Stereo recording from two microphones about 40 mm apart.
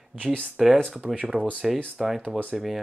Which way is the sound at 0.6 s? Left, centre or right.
Centre.